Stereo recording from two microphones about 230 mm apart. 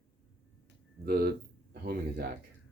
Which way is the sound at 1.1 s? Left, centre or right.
Right.